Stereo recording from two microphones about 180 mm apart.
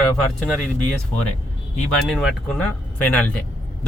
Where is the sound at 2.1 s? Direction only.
Centre (ahead or behind).